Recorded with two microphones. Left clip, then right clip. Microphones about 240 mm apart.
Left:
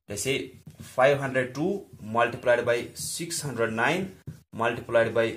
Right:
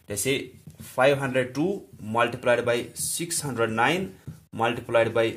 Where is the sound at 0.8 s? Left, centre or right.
Right.